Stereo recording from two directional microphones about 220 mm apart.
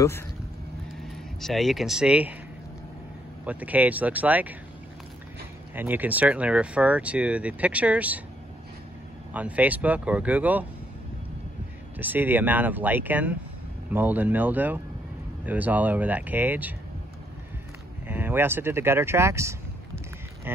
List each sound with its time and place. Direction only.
1.4 s speech: centre (ahead or behind)
3.4 s speech: 5° right (ahead or behind)
5.8 s speech: 10° right (ahead or behind)
9.3 s speech: 5° right (ahead or behind)
12.0 s speech: 10° right (ahead or behind)
18.0 s speech: 10° right (ahead or behind)
20.5 s a sound: 10° right (ahead or behind)